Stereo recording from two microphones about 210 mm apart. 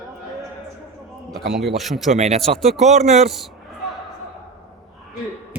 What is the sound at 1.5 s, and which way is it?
Speech, centre (ahead or behind).